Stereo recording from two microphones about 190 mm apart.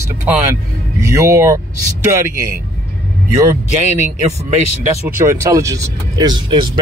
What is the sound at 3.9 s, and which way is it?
Speech, 35° right (ahead or behind).